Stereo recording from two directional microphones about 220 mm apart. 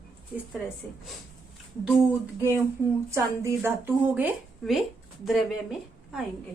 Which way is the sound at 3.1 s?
15° right (ahead or behind).